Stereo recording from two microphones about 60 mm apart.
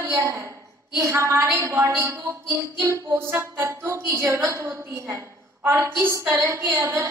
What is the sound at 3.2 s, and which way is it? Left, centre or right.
A woman's voice, right.